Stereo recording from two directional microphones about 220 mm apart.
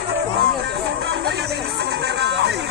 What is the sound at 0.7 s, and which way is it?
Music, 50° right (ahead or behind).